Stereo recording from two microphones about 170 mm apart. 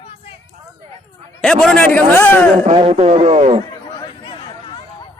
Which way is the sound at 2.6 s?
35° right (ahead or behind).